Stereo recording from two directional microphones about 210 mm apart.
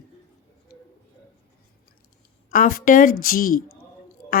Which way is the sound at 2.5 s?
40° left (ahead or behind).